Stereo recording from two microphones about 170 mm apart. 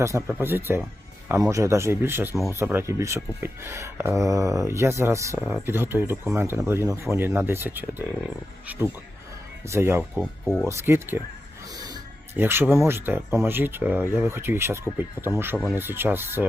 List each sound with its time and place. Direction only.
0.0 s speech: 15° right (ahead or behind)
9.6 s speech: 15° right (ahead or behind)
10.4 s speech: centre (ahead or behind)
10.7 s speech: 15° right (ahead or behind)
11.7 s music: 20° right (ahead or behind)
12.4 s speech: 15° right (ahead or behind)